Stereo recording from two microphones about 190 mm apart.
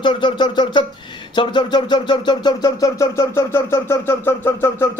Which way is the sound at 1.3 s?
25° left (ahead or behind).